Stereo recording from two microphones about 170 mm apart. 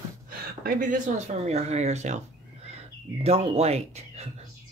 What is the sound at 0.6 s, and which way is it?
Speech, 50° right (ahead or behind).